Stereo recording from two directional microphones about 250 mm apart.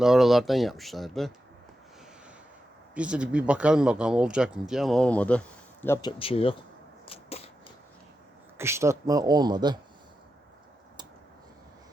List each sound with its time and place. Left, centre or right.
0.0 s speech: centre
2.9 s speech: centre; by 6.6 s left
7.0 s a sound: left
8.5 s speech: centre